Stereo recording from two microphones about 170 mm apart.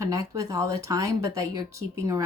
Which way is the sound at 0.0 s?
20° right (ahead or behind).